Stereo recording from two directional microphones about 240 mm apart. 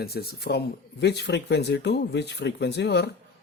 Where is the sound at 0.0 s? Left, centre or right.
Left.